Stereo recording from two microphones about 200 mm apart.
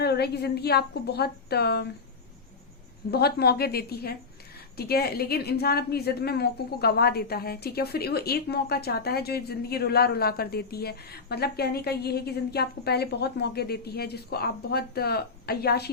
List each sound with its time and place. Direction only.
0.0 s a woman's voice: 55° left (ahead or behind)
3.1 s a woman's voice: 55° left (ahead or behind)